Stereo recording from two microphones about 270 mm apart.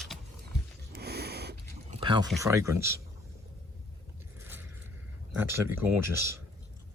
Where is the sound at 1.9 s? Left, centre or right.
Centre.